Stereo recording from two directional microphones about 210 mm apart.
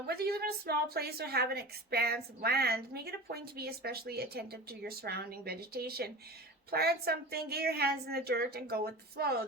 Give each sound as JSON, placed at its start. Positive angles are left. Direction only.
{"t": 0.1, "sound": "a woman's voice", "side_deg": -50}